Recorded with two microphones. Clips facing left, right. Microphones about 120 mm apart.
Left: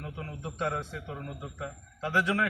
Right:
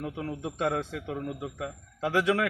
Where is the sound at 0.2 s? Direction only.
85° right.